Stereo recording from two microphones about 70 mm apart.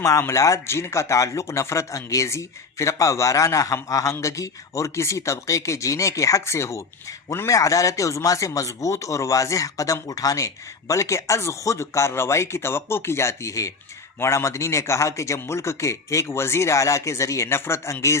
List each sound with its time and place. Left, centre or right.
0.2 s speech: left